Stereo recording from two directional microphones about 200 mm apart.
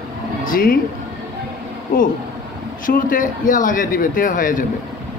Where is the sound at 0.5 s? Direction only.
45° left (ahead or behind).